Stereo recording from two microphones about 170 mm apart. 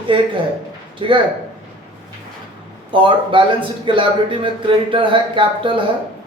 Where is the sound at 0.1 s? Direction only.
30° right (ahead or behind).